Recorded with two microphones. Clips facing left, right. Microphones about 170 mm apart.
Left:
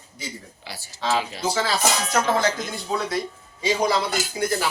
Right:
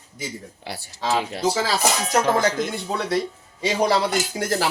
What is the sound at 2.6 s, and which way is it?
Speech, 65° right (ahead or behind).